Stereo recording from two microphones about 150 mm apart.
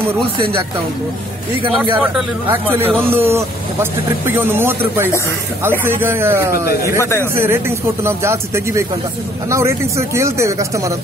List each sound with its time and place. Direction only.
1.9 s speech: 10° right (ahead or behind)
7.0 s speech: 20° left (ahead or behind)
7.3 s speech: 15° right (ahead or behind)